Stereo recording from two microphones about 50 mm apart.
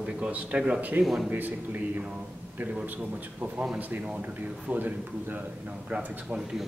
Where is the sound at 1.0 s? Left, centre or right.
Centre.